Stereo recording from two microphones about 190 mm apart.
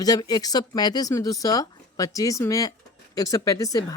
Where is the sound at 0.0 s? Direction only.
20° left (ahead or behind).